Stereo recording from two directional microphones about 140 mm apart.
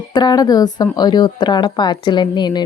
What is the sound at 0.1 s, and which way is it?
Speech, 30° left (ahead or behind).